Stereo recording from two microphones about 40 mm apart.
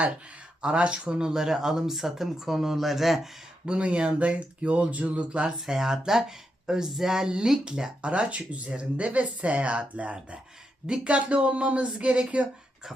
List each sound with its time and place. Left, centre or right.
0.6 s speech: right; by 3.3 s centre
3.7 s speech: right
5.5 s speech: centre; by 12.5 s right